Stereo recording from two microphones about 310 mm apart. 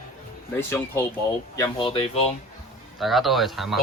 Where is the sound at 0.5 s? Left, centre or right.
Centre.